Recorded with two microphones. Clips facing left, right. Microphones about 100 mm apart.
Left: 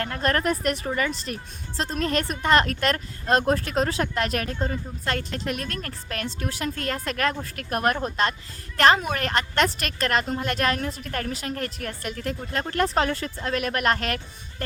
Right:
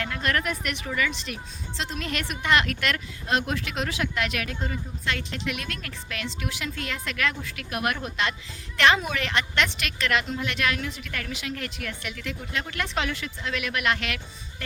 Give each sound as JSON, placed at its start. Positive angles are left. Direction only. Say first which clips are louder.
{"t": 0.0, "sound": "a woman's voice", "louder": "left 3 dB", "side_deg": 40}